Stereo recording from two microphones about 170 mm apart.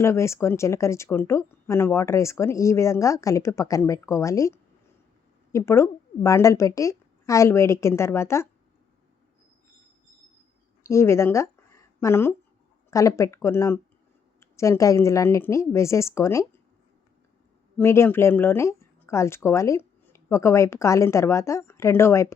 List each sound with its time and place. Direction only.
0.0 s speech: 15° left (ahead or behind)
10.8 s a woman's voice: 15° left (ahead or behind)
17.7 s speech: 15° left (ahead or behind)